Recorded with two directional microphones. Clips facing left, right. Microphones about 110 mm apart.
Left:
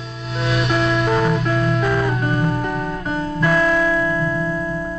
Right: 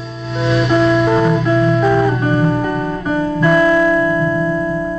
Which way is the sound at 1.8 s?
15° right (ahead or behind).